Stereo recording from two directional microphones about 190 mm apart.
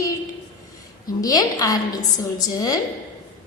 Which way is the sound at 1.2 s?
20° left (ahead or behind).